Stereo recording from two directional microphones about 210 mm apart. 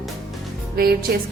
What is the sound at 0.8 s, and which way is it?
Speech, 45° right (ahead or behind).